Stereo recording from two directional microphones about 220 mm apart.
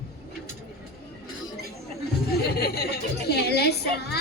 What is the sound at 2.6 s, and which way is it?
Speech, 45° left (ahead or behind).